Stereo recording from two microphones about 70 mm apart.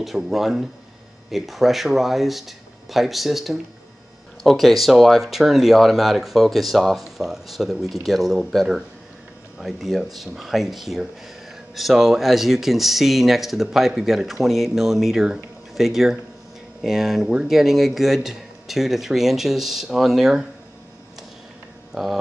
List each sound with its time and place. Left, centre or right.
0.0 s speech: centre
21.9 s speech: centre